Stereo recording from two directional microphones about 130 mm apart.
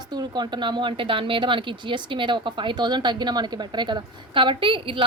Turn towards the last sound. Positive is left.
turn(degrees=-40)  # may be behind; listen again after turning